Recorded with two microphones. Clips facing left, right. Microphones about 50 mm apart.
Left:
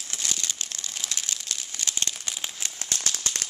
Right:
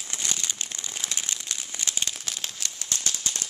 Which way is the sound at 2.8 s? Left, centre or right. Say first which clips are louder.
Left 1 dB; left.